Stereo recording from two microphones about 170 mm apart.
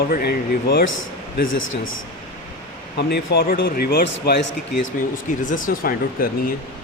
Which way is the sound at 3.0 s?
80° left.